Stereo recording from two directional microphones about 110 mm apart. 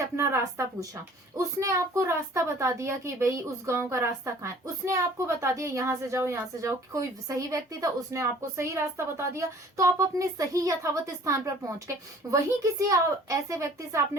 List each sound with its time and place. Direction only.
0.0 s a woman's voice: 25° right (ahead or behind)